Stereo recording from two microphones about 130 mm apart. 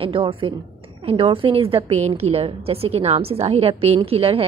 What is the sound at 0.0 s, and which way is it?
A woman's voice, 40° right (ahead or behind).